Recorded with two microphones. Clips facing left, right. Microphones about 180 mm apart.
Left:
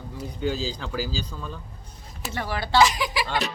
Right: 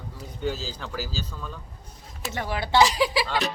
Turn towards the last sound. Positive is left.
turn(degrees=-30)  # may be behind; listen again after turning